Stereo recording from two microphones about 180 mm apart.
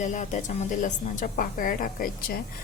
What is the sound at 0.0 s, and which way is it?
Speech, 45° left (ahead or behind).